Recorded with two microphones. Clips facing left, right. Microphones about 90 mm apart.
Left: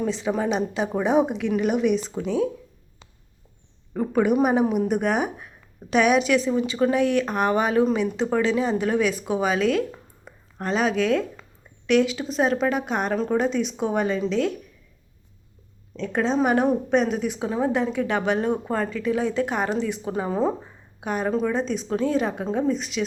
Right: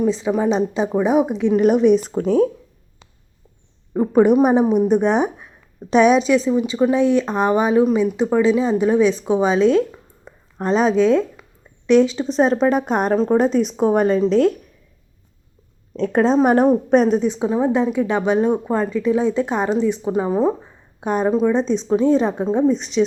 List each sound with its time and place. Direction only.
0.0 s speech: 20° right (ahead or behind)
1.0 s speech: 10° right (ahead or behind)
1.5 s a woman's voice: 40° right (ahead or behind)
4.1 s a woman's voice: 35° right (ahead or behind)
4.8 s a woman's voice: 20° right (ahead or behind); by 14.5 s 45° right (ahead or behind)
16.0 s a woman's voice: 45° right (ahead or behind)
17.2 s speech: 25° right (ahead or behind)
21.0 s a woman's voice: 30° right (ahead or behind)
21.2 s speech: 20° right (ahead or behind)